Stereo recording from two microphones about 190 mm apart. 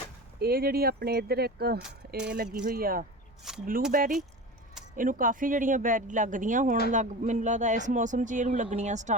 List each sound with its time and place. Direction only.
0.3 s speech: 55° right (ahead or behind)
3.5 s speech: 5° right (ahead or behind)
3.9 s speech: 45° right (ahead or behind)